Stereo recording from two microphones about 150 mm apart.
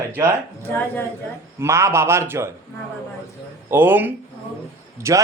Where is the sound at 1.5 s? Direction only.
20° right (ahead or behind).